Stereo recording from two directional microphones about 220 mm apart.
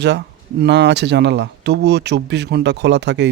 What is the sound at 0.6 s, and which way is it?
Speech, 50° right (ahead or behind).